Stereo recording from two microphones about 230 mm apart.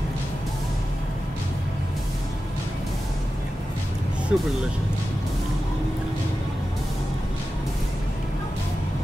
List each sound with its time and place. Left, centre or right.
4.3 s speech: centre